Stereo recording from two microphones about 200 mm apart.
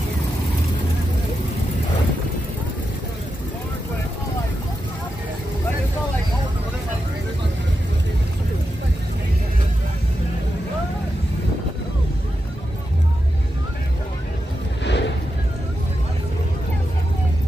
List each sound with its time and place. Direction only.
14.8 s vehicle: 60° left (ahead or behind)